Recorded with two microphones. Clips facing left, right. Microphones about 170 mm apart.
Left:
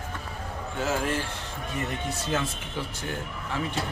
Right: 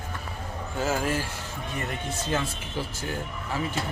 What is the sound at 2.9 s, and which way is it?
Speech, 5° right (ahead or behind).